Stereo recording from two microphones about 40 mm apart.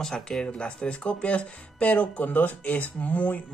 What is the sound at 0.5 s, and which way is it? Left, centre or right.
Speech, left.